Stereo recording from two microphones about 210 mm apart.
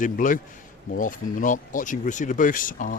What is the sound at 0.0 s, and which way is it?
Speech, 40° left (ahead or behind).